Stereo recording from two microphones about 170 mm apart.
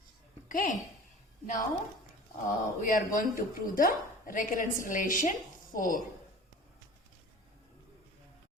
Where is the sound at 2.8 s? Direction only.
50° left (ahead or behind).